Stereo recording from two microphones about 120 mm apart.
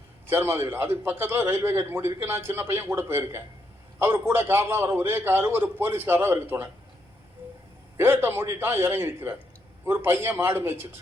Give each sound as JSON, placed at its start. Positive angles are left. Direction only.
{"t": 0.3, "sound": "a man's voice", "side_deg": -20}
{"t": 7.9, "sound": "a man's voice", "side_deg": -20}